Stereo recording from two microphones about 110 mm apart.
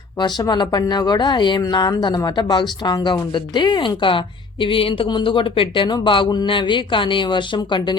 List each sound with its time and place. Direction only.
0.2 s speech: 40° left (ahead or behind)